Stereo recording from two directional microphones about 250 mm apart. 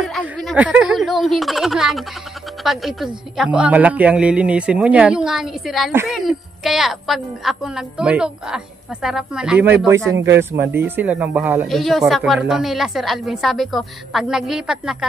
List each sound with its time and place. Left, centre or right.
0.0 s speech: centre
10.1 s speech: right
10.5 s speech: centre